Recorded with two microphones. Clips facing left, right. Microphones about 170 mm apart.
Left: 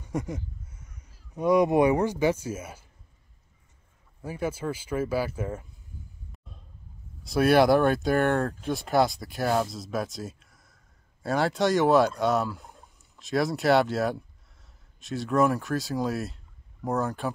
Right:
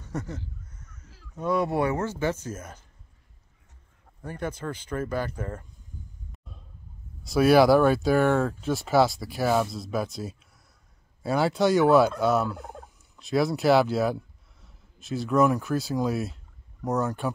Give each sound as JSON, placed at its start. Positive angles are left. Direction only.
{"t": 0.0, "sound": "a sound", "side_deg": 10}
{"t": 1.3, "sound": "speech", "side_deg": 15}
{"t": 4.2, "sound": "speech", "side_deg": 5}
{"t": 7.2, "sound": "speech", "side_deg": 0}
{"t": 12.5, "sound": "fowl", "side_deg": -60}
{"t": 13.1, "sound": "speech", "side_deg": 0}